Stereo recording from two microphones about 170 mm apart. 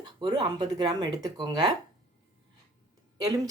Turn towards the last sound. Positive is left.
turn(degrees=-20)  # may be behind; listen again after turning